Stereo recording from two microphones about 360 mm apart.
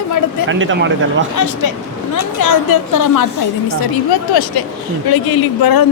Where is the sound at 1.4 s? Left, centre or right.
Left.